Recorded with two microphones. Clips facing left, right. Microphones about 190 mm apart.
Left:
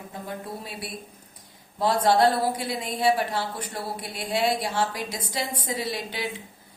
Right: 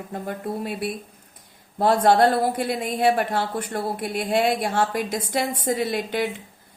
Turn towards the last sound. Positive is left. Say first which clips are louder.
# right 6 dB
turn(degrees=-55)  # may be behind; listen again after turning